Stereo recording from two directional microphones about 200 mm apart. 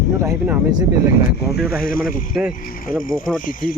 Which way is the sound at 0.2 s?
10° right (ahead or behind).